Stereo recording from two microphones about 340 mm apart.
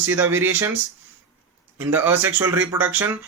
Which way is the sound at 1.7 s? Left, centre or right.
Centre.